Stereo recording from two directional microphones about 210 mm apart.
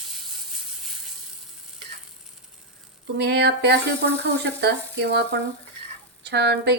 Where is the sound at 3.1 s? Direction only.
50° right (ahead or behind).